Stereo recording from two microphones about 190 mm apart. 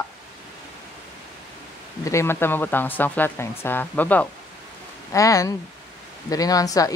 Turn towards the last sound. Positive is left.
turn(degrees=20)  # may be behind; listen again after turning